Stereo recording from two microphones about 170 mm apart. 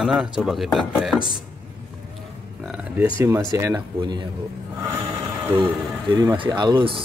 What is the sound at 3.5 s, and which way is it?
Speech, 20° right (ahead or behind).